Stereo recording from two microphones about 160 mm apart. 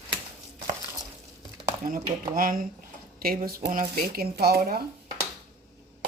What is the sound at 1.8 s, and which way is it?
Speech, 60° right (ahead or behind).